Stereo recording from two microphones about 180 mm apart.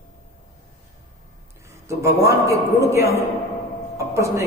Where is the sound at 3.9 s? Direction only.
15° right (ahead or behind).